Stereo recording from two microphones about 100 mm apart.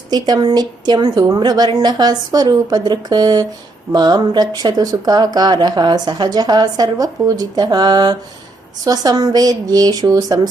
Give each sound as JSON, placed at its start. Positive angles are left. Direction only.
{"t": 0.1, "sound": "speech", "side_deg": -45}